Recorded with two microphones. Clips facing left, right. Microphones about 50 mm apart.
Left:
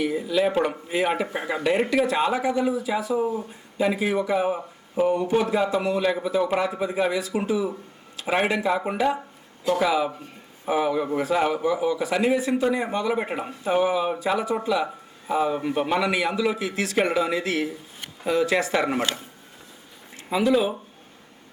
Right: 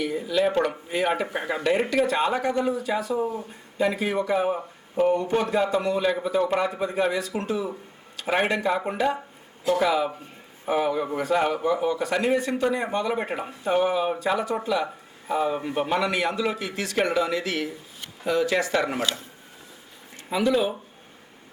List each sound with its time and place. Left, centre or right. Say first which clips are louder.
0.0 s a man's voice: left 1 dB; centre
18.9 s speech: left 1 dB; left
20.3 s speech: left 2 dB; centre